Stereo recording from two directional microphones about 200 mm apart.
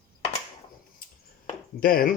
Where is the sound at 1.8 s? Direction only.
45° left (ahead or behind).